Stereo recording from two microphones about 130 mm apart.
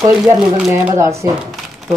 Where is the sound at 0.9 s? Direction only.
20° right (ahead or behind).